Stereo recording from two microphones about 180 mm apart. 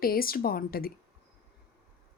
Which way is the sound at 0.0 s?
55° left (ahead or behind).